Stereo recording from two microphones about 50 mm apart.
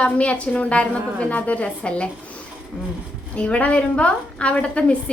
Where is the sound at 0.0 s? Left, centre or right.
Left.